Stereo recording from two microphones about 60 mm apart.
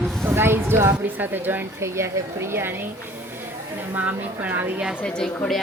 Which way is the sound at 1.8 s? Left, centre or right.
Right.